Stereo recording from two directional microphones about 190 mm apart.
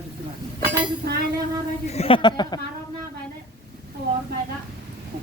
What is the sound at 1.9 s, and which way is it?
Speech, 30° left (ahead or behind).